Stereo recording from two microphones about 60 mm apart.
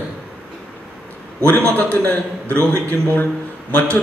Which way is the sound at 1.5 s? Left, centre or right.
Left.